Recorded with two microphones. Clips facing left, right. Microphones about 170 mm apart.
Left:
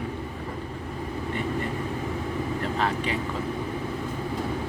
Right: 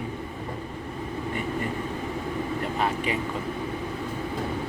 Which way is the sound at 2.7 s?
10° right (ahead or behind).